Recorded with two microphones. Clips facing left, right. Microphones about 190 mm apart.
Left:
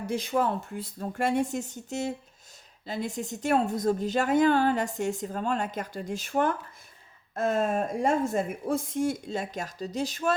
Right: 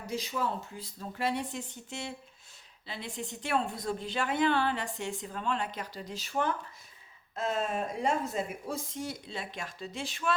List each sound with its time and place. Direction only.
0.1 s a woman's voice: 55° left (ahead or behind)